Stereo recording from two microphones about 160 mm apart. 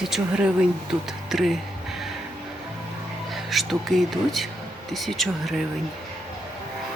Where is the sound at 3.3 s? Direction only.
Centre (ahead or behind).